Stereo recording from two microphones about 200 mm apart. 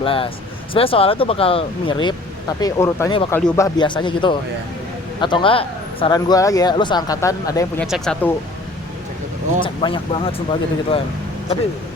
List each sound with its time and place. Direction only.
0.0 s speech: 25° left (ahead or behind)
7.8 s speech: centre (ahead or behind)
9.6 s speech: 25° left (ahead or behind)